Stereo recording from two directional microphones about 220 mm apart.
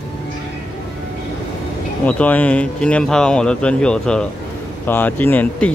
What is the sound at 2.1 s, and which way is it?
Speech, 5° left (ahead or behind).